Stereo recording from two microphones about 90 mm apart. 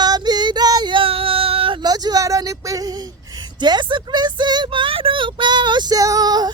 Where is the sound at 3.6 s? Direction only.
55° right (ahead or behind).